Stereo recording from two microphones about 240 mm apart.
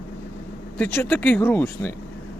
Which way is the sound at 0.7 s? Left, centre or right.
Centre.